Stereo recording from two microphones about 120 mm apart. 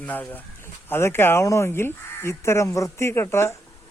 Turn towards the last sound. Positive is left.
turn(degrees=20)  # may be behind; listen again after turning